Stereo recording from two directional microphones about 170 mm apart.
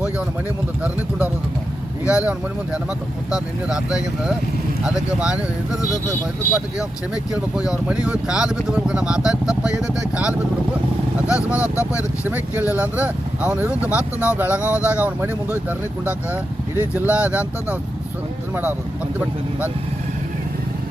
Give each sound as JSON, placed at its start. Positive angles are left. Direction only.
{"t": 2.0, "sound": "speech", "side_deg": -5}
{"t": 3.3, "sound": "speech", "side_deg": -5}
{"t": 6.4, "sound": "speech", "side_deg": 55}
{"t": 7.5, "sound": "speech", "side_deg": -5}
{"t": 11.3, "sound": "speech", "side_deg": -5}
{"t": 16.8, "sound": "speech", "side_deg": -10}